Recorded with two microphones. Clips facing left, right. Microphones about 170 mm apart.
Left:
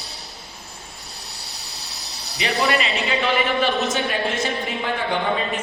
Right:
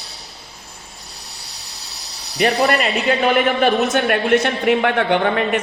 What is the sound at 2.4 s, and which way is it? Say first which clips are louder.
A man's voice: right 5 dB; 50° right (ahead or behind).